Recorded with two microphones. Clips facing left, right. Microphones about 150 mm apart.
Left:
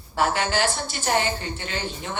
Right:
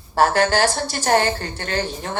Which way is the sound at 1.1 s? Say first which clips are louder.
Right 5 dB; 55° right (ahead or behind).